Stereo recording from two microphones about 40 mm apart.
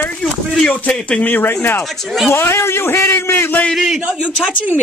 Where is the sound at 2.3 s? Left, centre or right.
Left.